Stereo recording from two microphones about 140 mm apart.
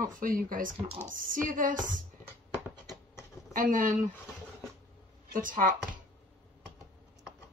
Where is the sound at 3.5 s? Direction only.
70° right (ahead or behind).